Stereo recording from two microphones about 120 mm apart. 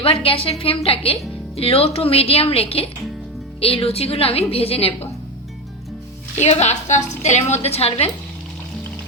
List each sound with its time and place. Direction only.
0.0 s a woman's voice: 50° left (ahead or behind)
6.4 s a woman's voice: 65° left (ahead or behind)
7.6 s a woman's voice: 55° left (ahead or behind)